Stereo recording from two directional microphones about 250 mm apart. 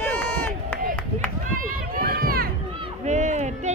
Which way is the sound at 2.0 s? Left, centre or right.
Right.